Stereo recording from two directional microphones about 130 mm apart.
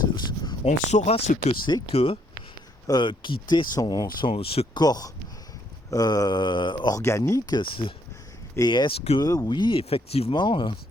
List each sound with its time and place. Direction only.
0.6 s speech: 60° left (ahead or behind)
2.8 s speech: 35° left (ahead or behind)
4.3 s speech: 45° left (ahead or behind)
4.8 s speech: 30° left (ahead or behind)